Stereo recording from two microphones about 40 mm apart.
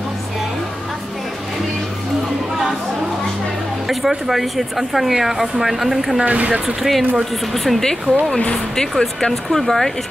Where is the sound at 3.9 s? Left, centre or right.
Centre.